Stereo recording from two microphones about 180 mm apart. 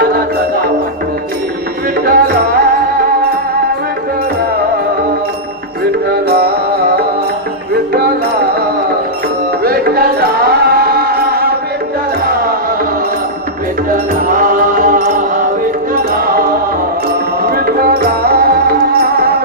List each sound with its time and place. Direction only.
2.0 s music: 55° right (ahead or behind)
6.1 s music: 55° right (ahead or behind)
9.6 s music: 55° right (ahead or behind)
13.9 s music: 50° right (ahead or behind)